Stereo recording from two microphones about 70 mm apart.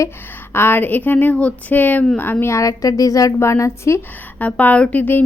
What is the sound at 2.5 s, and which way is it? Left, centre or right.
Speech, left.